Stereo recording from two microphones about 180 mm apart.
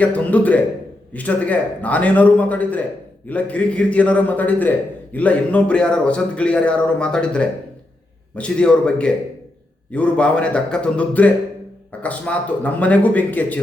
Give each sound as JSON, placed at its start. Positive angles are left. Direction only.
{"t": 0.0, "sound": "a man's voice", "side_deg": 10}